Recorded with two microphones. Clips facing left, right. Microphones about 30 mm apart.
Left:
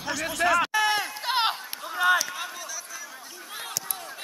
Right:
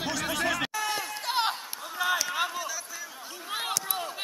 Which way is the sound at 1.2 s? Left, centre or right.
Left.